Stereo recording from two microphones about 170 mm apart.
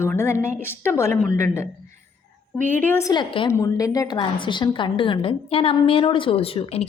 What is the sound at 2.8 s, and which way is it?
Speech, 15° left (ahead or behind).